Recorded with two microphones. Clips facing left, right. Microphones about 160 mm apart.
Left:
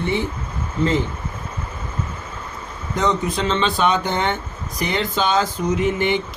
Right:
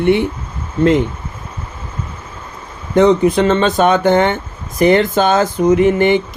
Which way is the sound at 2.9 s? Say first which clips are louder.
Right 11 dB; 60° right (ahead or behind).